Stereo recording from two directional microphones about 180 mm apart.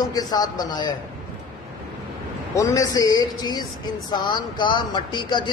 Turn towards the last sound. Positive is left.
turn(degrees=25)  # may be behind; listen again after turning